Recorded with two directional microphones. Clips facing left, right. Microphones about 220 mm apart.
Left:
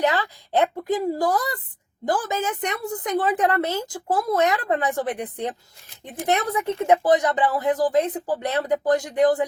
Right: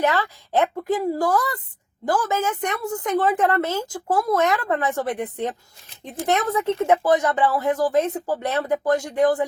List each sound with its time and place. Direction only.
0.0 s speech: 20° left (ahead or behind)